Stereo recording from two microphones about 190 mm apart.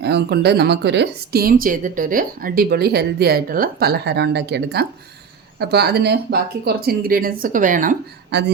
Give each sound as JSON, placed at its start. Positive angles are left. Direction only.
{"t": 0.0, "sound": "speech", "side_deg": -60}
{"t": 8.3, "sound": "speech", "side_deg": -65}